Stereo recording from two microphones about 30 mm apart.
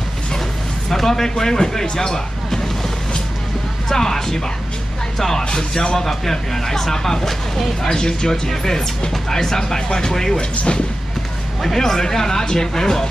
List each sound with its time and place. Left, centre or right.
0.8 s speech: centre
3.9 s speech: centre
5.6 s speech: centre
7.9 s speech: left
10.3 s speech: left
11.6 s speech: centre